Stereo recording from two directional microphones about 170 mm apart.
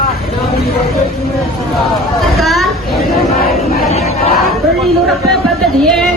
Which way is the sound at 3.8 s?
40° left (ahead or behind).